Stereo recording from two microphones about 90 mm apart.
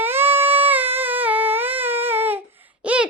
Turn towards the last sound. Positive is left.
turn(degrees=-15)  # may be behind; listen again after turning